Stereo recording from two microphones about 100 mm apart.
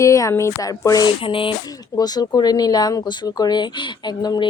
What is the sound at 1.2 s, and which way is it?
Speech, 60° left (ahead or behind).